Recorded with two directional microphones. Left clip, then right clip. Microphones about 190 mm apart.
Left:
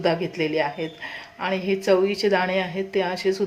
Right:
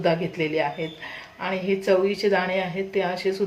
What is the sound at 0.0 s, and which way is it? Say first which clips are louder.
Speech: even; 25° left (ahead or behind).